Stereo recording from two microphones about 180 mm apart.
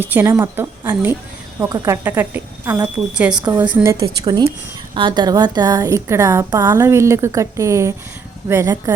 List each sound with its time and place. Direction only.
0.0 s a woman's voice: 10° right (ahead or behind)
4.0 s a woman's voice: 20° right (ahead or behind)